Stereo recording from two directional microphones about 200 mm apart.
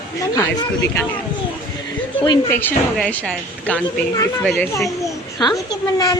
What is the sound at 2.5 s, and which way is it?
A woman's voice, 10° left (ahead or behind).